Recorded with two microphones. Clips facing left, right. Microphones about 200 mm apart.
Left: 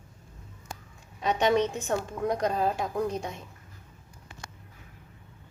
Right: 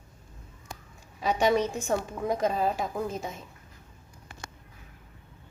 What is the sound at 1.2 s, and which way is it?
A woman's voice, 5° right (ahead or behind).